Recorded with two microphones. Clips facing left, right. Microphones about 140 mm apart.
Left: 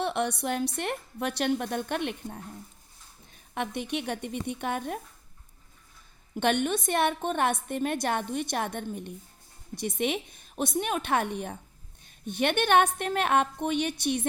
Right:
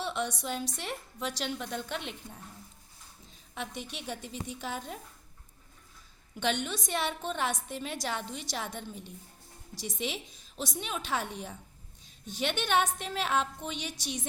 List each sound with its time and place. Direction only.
0.0 s a woman's voice: 60° left (ahead or behind)
3.8 s a woman's voice: 65° left (ahead or behind)
6.3 s a woman's voice: 55° left (ahead or behind)